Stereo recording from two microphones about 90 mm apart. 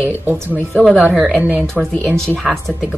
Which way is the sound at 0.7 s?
15° left (ahead or behind).